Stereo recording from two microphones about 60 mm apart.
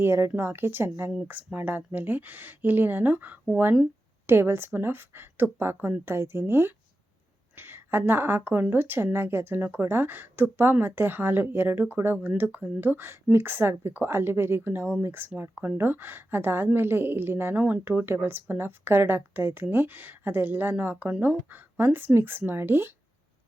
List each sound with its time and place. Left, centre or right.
0.0 s a woman's voice: right
4.3 s a woman's voice: right
17.5 s speech: right
17.8 s a woman's voice: right